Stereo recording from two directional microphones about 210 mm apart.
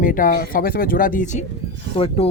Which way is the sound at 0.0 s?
40° left (ahead or behind).